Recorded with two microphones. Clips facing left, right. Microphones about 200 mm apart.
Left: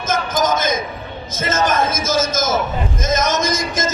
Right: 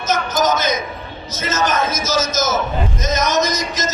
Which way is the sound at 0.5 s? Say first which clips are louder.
Even; 50° left (ahead or behind).